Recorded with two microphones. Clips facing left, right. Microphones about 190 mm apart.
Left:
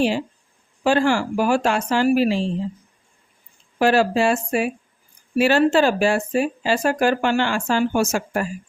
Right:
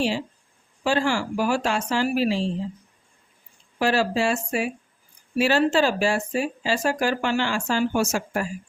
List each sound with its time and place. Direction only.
0.9 s speech: 55° left (ahead or behind)
3.8 s speech: 55° left (ahead or behind)